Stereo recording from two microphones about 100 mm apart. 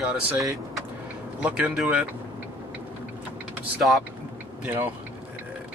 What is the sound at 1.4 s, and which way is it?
Speech, 10° right (ahead or behind).